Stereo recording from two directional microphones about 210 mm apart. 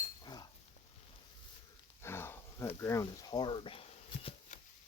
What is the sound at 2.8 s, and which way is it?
Speech, 15° left (ahead or behind).